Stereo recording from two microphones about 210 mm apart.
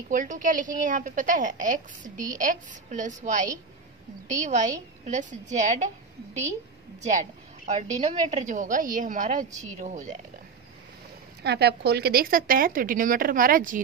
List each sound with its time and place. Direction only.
0.1 s a woman's voice: 40° right (ahead or behind)
7.0 s a woman's voice: 35° right (ahead or behind)
11.4 s a woman's voice: 50° right (ahead or behind)